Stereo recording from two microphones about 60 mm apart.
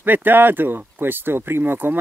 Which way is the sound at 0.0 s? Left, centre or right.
Right.